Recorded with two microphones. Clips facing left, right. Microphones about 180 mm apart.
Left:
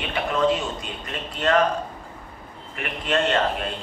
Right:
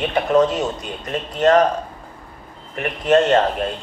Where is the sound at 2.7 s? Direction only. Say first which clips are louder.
Right 9 dB; 40° right (ahead or behind).